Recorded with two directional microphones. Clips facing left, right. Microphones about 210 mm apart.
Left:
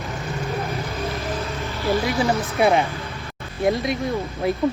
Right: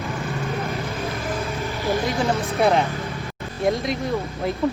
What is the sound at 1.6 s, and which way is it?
Vehicle, 15° right (ahead or behind).